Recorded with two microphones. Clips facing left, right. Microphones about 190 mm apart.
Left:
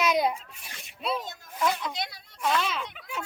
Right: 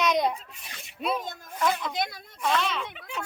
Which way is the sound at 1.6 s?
Centre (ahead or behind).